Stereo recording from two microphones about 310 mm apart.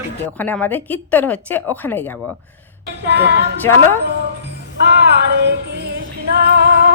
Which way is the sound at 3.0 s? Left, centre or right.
Right.